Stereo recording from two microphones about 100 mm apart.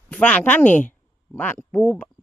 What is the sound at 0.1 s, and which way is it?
Speech, 15° left (ahead or behind).